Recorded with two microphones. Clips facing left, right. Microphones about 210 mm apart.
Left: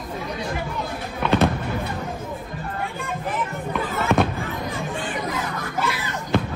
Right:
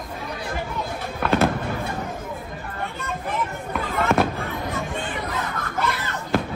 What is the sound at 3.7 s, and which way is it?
Fireworks, centre (ahead or behind).